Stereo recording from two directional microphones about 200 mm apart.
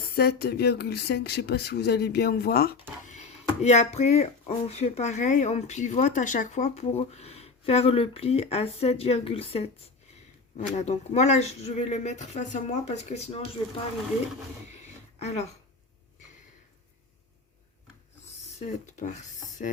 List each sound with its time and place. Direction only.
0.1 s speech: 50° left (ahead or behind)
3.0 s speech: 35° left (ahead or behind)
10.8 s speech: 35° left (ahead or behind)
15.2 s speech: 35° left (ahead or behind)
18.6 s speech: 35° left (ahead or behind)